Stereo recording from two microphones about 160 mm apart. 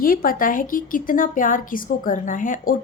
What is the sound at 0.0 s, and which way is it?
A woman's voice, 65° left (ahead or behind).